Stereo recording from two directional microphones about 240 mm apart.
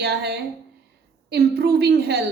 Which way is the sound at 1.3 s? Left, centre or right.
Right.